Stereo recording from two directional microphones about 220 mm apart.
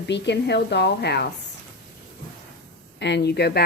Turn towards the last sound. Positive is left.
turn(degrees=45)  # may be behind; listen again after turning